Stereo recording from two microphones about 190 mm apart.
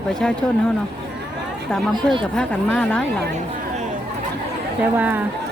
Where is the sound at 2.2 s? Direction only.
5° left (ahead or behind).